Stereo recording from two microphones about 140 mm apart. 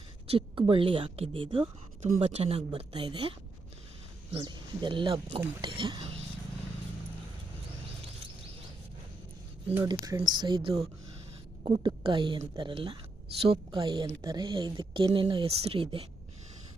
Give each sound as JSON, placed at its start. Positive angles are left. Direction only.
{"t": 0.3, "sound": "speech", "side_deg": -40}
{"t": 9.8, "sound": "speech", "side_deg": -30}